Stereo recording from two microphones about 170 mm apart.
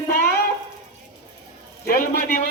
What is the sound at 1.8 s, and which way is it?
Speech, 60° left (ahead or behind).